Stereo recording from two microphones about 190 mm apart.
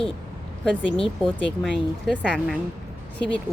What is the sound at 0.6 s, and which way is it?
Speech, 5° left (ahead or behind).